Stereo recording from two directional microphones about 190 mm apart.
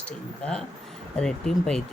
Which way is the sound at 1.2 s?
5° left (ahead or behind).